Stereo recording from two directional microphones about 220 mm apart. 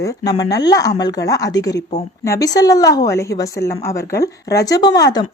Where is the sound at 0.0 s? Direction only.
15° left (ahead or behind).